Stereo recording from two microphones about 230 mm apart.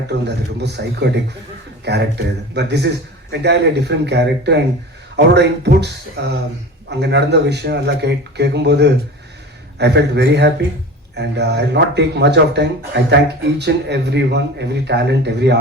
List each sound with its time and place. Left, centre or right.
0.1 s speech: right